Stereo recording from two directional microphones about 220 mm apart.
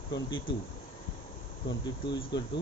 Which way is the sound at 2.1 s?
20° left (ahead or behind).